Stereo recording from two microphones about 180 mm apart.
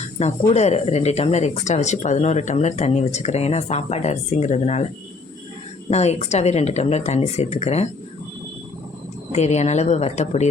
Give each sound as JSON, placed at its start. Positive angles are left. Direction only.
{"t": 0.2, "sound": "speech", "side_deg": 40}
{"t": 5.9, "sound": "speech", "side_deg": 35}
{"t": 9.3, "sound": "speech", "side_deg": 40}